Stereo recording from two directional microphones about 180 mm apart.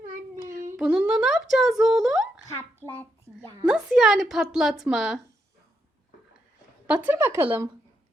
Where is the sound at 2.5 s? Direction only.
15° left (ahead or behind).